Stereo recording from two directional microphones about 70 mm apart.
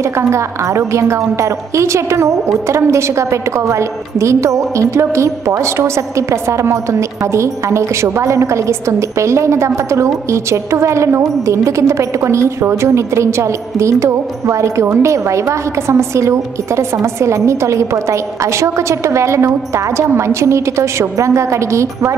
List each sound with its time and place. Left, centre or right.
0.0 s a woman's voice: right